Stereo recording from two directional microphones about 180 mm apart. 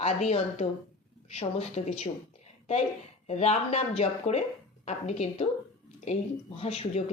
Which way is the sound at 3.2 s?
35° left (ahead or behind).